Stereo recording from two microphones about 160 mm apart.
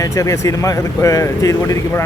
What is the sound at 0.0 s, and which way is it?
Speech, 20° left (ahead or behind).